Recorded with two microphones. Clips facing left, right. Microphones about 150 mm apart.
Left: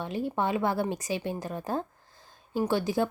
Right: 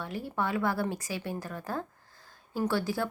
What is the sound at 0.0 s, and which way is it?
Speech, 20° left (ahead or behind).